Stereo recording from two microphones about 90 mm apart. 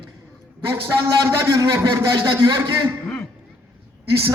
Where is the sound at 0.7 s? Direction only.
30° right (ahead or behind).